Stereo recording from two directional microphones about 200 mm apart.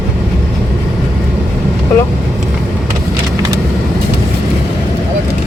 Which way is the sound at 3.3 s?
15° right (ahead or behind).